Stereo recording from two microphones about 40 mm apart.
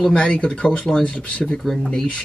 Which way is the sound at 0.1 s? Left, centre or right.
Left.